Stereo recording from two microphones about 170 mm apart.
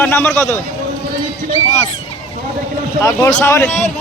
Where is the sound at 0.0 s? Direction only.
10° left (ahead or behind).